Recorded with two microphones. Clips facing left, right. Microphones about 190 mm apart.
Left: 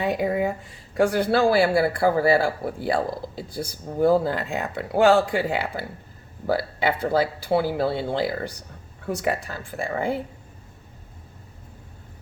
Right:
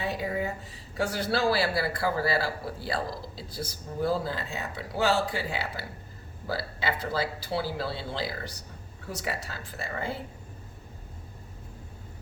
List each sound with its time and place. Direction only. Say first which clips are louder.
0.0 s speech: left 8 dB; 65° left (ahead or behind)